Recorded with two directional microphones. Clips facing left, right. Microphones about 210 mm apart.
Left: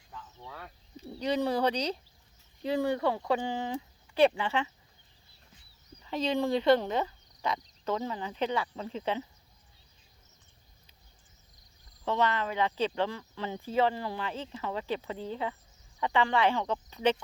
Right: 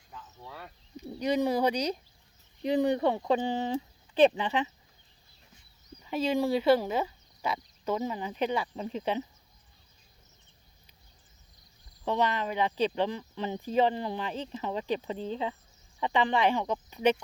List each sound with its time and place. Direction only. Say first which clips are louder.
0.1 s cricket: even; 5° right (ahead or behind)
1.0 s speech: right 2 dB; 10° right (ahead or behind)
6.0 s speech: right 2 dB; 10° right (ahead or behind)
12.0 s speech: even; 15° right (ahead or behind)